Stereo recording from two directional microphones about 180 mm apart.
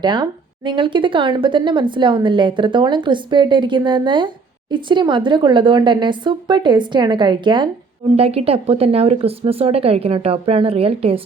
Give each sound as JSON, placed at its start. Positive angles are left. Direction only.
{"t": 0.0, "sound": "speech", "side_deg": -25}